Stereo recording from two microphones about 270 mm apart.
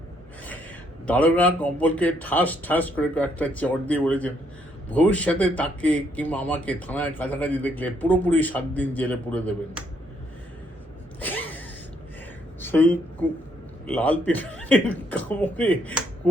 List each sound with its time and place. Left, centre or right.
1.0 s speech: centre
11.2 s a sound: centre
13.2 s speech: centre